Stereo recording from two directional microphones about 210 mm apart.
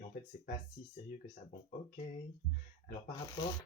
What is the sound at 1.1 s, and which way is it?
Speech, 40° left (ahead or behind).